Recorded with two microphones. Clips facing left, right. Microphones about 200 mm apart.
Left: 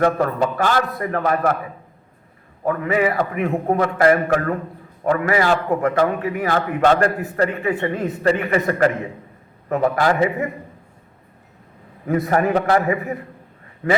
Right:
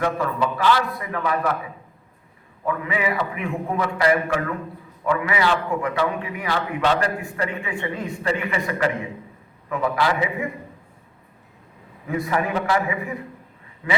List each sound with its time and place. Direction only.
0.0 s a man's voice: 50° left (ahead or behind)
2.6 s a man's voice: 45° left (ahead or behind)
7.9 s a man's voice: 55° left (ahead or behind)
12.0 s a man's voice: 45° left (ahead or behind)